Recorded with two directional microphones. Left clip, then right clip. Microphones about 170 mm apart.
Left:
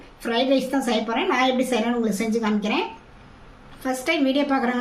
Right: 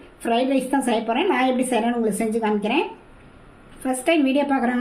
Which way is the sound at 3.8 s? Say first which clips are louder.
Right 2 dB; 20° right (ahead or behind).